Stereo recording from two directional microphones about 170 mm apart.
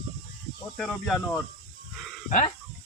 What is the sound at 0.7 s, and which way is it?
Speech, centre (ahead or behind).